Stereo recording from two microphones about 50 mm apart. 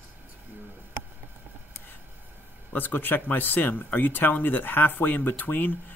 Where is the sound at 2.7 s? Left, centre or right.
Left.